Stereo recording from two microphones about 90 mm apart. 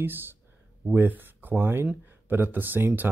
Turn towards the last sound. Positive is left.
turn(degrees=-20)  # may be behind; listen again after turning